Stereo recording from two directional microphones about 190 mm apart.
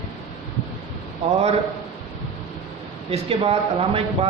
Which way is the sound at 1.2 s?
35° right (ahead or behind).